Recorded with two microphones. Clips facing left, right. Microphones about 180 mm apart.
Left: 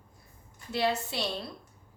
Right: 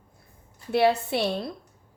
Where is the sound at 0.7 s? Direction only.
60° right (ahead or behind).